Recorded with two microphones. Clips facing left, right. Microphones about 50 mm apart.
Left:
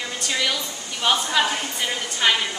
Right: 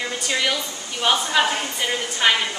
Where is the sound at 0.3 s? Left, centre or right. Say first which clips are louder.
Right 1 dB; centre.